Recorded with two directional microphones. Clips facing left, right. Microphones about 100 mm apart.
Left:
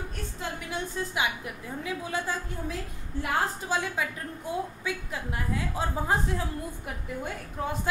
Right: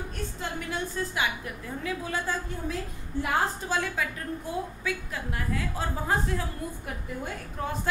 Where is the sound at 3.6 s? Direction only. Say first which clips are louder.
Even; 15° left (ahead or behind).